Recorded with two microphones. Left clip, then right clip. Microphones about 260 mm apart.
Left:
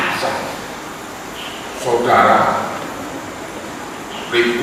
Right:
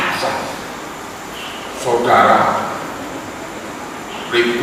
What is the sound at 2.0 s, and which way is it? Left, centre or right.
Speech, centre.